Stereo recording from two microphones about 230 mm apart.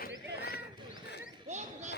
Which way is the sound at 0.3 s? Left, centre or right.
Left.